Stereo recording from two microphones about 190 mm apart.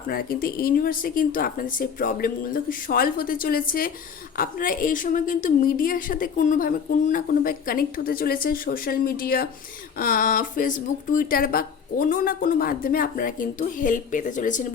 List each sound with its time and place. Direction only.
0.1 s a woman's voice: 50° left (ahead or behind)